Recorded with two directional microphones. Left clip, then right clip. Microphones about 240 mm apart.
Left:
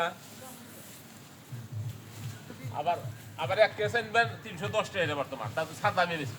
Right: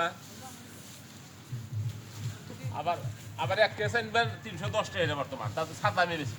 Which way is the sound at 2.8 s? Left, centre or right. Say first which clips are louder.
Left 2 dB; centre.